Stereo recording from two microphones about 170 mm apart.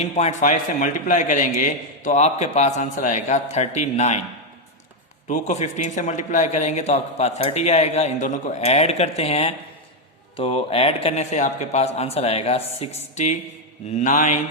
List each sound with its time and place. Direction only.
0.0 s a man's voice: 40° left (ahead or behind)
5.3 s a man's voice: 45° left (ahead or behind)